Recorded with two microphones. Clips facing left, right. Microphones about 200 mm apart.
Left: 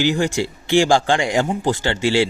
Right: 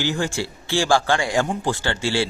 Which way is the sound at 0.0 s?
15° left (ahead or behind).